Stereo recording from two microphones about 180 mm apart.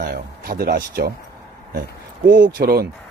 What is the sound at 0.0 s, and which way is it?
Speech, 55° right (ahead or behind).